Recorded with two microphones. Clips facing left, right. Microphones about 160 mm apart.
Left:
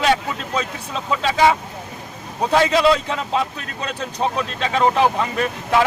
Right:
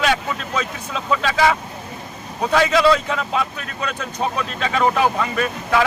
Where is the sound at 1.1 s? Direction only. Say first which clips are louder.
Left 1 dB; 20° left (ahead or behind).